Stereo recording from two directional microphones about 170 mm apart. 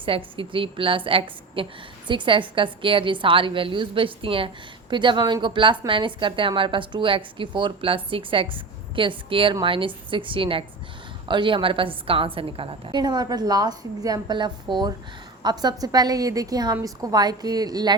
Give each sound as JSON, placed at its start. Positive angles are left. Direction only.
{"t": 0.3, "sound": "a woman's voice", "side_deg": -30}